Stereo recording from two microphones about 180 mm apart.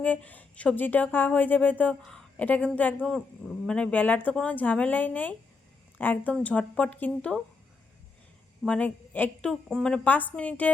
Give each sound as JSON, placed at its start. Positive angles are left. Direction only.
{"t": 0.0, "sound": "a woman's voice", "side_deg": 10}
{"t": 8.6, "sound": "a woman's voice", "side_deg": 5}